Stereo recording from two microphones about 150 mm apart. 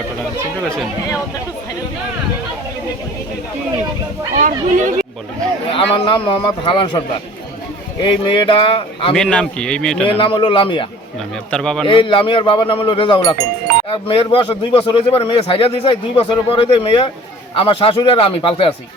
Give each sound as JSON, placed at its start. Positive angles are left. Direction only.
{"t": 4.4, "sound": "speech", "side_deg": -60}
{"t": 5.7, "sound": "a man's voice", "side_deg": 35}
{"t": 8.0, "sound": "a man's voice", "side_deg": 35}
{"t": 9.1, "sound": "speech", "side_deg": 5}
{"t": 10.2, "sound": "a man's voice", "side_deg": 35}
{"t": 11.5, "sound": "speech", "side_deg": 5}
{"t": 11.9, "sound": "a man's voice", "side_deg": 35}